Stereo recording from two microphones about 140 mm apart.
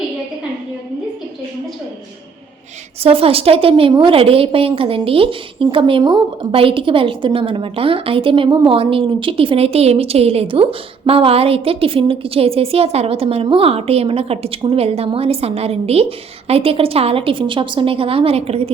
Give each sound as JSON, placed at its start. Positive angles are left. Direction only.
{"t": 3.0, "sound": "a woman's voice", "side_deg": -40}